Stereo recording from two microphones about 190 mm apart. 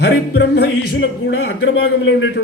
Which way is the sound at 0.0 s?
60° left (ahead or behind).